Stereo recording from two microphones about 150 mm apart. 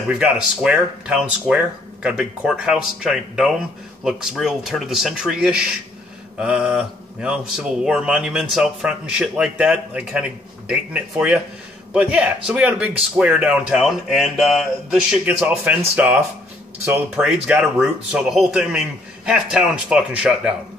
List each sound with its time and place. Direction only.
0.2 s speech: 5° right (ahead or behind)
17.3 s speech: 5° right (ahead or behind)